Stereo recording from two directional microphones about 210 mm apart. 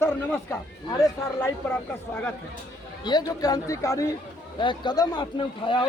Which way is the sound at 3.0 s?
20° left (ahead or behind).